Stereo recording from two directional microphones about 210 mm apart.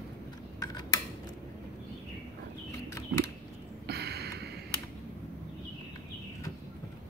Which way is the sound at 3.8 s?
50° right (ahead or behind).